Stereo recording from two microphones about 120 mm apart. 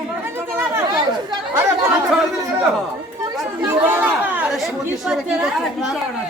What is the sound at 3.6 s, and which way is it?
Chatter, 15° right (ahead or behind).